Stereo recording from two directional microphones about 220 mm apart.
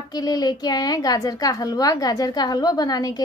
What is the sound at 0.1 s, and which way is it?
A woman's voice, 15° left (ahead or behind).